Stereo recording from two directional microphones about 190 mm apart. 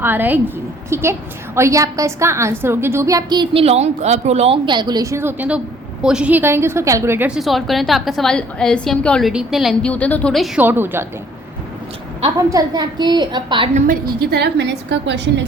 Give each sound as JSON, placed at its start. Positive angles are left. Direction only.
{"t": 0.0, "sound": "a woman's voice", "side_deg": -10}
{"t": 12.4, "sound": "a woman's voice", "side_deg": -20}
{"t": 13.7, "sound": "a woman's voice", "side_deg": -45}